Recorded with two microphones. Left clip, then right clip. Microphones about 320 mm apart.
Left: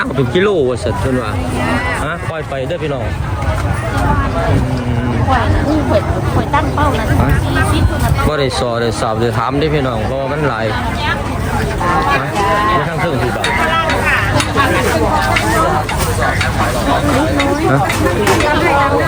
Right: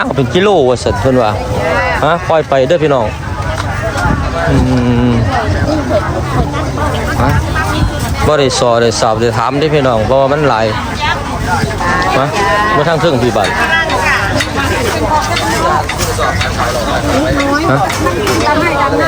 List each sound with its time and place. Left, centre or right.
0.3 s speech: centre
2.6 s speech: centre
8.3 s speech: centre